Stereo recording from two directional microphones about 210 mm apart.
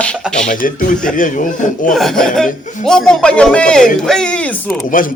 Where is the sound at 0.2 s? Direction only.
5° left (ahead or behind).